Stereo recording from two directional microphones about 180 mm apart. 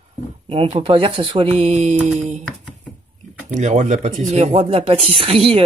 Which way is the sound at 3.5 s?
40° right (ahead or behind).